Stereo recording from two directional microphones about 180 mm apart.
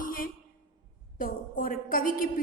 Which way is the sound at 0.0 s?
50° left (ahead or behind).